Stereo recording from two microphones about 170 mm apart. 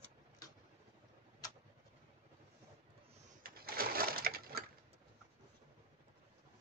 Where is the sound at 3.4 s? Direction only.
60° right (ahead or behind).